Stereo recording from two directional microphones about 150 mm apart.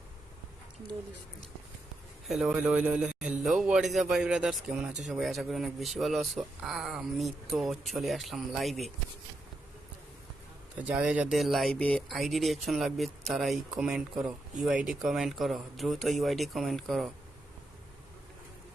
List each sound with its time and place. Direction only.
2.2 s a man's voice: 5° right (ahead or behind)
10.8 s a man's voice: 10° right (ahead or behind)